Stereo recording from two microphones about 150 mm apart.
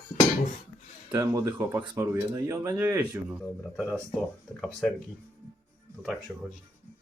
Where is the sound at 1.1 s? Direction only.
20° right (ahead or behind).